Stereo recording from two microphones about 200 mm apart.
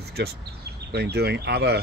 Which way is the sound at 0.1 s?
55° right (ahead or behind).